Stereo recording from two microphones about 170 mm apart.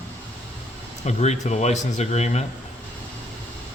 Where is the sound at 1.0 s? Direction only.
40° left (ahead or behind).